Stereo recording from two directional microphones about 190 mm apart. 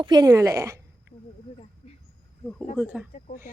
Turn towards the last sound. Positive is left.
turn(degrees=-5)  # may be behind; listen again after turning